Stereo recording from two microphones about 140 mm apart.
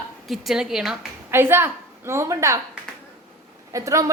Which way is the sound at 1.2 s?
15° right (ahead or behind).